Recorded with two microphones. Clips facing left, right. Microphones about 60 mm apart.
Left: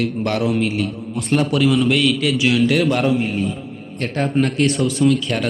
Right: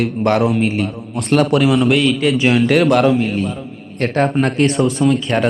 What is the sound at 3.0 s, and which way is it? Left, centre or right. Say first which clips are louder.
Speech: right 4 dB; right.